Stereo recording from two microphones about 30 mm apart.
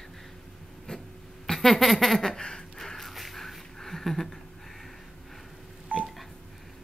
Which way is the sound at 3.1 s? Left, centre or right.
Centre.